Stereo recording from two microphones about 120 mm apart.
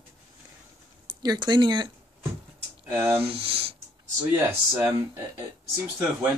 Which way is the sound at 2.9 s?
20° right (ahead or behind).